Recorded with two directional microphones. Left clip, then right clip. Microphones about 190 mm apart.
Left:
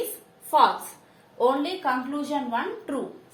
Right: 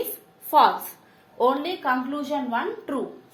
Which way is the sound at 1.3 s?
35° right (ahead or behind).